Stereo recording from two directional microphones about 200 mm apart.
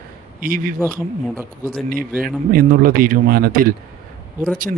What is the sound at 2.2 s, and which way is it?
Speech, 45° right (ahead or behind).